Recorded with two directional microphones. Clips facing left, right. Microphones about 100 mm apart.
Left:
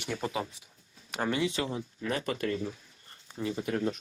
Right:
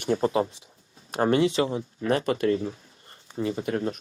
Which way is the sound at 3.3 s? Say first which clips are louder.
Right 5 dB; 55° right (ahead or behind).